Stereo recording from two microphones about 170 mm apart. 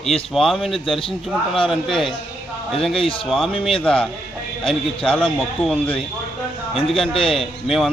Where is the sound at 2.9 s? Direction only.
30° left (ahead or behind).